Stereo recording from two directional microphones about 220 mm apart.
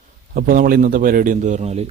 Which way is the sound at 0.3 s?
40° right (ahead or behind).